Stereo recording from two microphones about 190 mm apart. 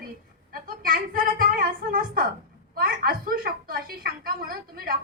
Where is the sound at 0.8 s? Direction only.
50° right (ahead or behind).